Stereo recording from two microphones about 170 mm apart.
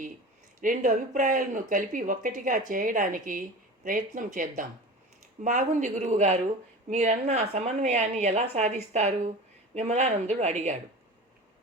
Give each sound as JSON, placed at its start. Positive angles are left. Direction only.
{"t": 0.6, "sound": "a woman's voice", "side_deg": -50}